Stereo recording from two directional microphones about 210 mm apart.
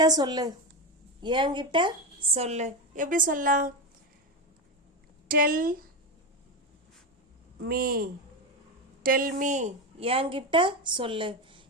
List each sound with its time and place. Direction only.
0.0 s a woman's voice: 20° right (ahead or behind); by 3.7 s 40° right (ahead or behind)
5.3 s speech: 40° right (ahead or behind)
7.6 s speech: 45° right (ahead or behind)
9.0 s a woman's voice: 40° right (ahead or behind); by 11.6 s 25° right (ahead or behind)